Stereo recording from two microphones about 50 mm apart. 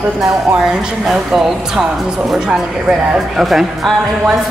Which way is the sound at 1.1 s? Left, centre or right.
Centre.